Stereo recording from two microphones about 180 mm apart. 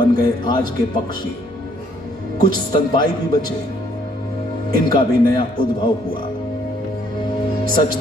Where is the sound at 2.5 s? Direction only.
25° left (ahead or behind).